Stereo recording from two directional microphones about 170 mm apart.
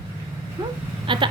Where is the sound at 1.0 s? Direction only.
30° right (ahead or behind).